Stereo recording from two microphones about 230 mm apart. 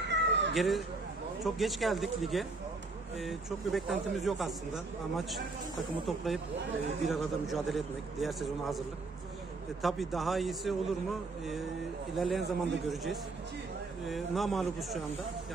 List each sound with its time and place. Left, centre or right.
0.1 s cat: right
0.6 s speech: centre
12.2 s speech: centre